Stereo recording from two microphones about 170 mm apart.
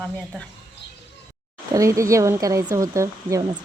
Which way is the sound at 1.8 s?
20° right (ahead or behind).